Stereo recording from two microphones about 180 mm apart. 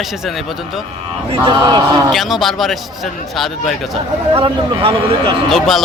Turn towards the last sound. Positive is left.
turn(degrees=0)  # may be behind; listen again after turning